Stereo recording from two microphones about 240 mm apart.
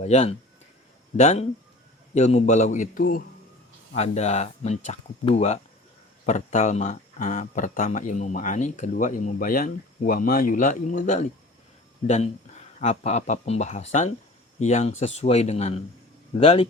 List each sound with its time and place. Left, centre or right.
0.0 s speech: left